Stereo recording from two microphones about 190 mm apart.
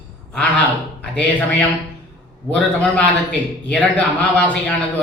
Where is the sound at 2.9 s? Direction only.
5° left (ahead or behind).